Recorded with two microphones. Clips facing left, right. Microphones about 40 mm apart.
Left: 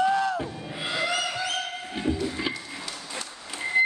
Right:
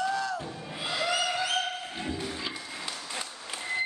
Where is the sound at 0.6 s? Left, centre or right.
Centre.